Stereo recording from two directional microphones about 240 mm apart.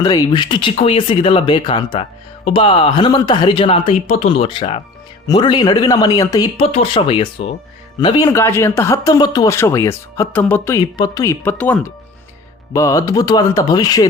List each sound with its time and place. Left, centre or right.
0.0 s speech: centre